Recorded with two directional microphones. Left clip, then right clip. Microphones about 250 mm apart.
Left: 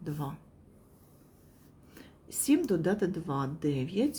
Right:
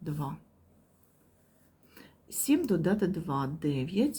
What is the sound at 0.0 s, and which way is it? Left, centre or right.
Speech, centre.